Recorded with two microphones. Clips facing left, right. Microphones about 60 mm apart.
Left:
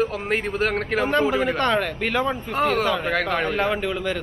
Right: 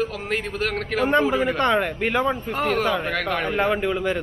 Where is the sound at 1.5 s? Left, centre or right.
Centre.